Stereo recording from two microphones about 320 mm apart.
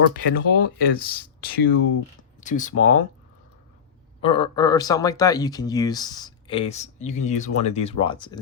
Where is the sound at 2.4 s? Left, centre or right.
Left.